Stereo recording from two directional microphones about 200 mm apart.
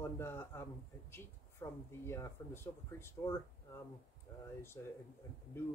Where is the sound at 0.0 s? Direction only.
10° left (ahead or behind).